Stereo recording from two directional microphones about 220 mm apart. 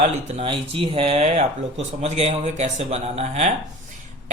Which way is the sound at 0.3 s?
25° right (ahead or behind).